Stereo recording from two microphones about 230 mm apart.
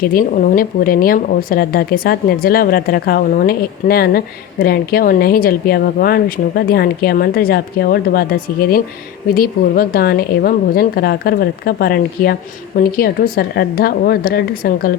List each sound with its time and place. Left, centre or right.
0.0 s speech: left